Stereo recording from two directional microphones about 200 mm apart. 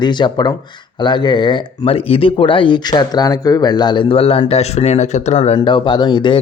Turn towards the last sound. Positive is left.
turn(degrees=25)  # may be behind; listen again after turning